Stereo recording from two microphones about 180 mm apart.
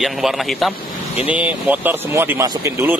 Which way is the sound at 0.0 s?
Centre (ahead or behind).